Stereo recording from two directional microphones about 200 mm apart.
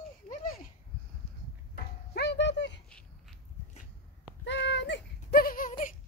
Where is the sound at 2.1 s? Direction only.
60° left (ahead or behind).